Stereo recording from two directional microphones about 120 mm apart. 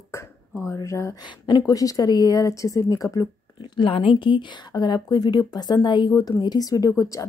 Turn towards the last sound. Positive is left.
turn(degrees=30)  # may be behind; listen again after turning